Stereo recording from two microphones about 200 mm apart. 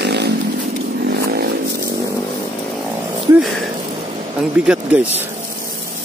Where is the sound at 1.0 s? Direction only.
50° right (ahead or behind).